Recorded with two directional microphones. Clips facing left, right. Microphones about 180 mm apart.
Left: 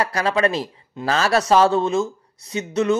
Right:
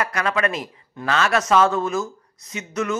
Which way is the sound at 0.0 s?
35° left (ahead or behind).